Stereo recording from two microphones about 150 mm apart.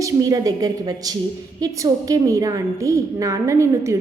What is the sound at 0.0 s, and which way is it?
A woman's voice, 25° right (ahead or behind).